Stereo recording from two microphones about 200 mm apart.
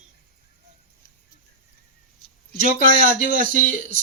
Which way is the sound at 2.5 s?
50° left (ahead or behind).